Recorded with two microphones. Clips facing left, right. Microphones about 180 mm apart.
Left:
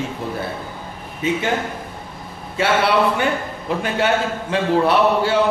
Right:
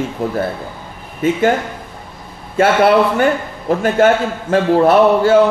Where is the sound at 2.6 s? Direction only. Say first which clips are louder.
Right 6 dB; 50° right (ahead or behind).